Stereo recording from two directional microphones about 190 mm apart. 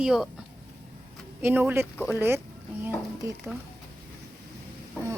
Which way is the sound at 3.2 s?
15° right (ahead or behind).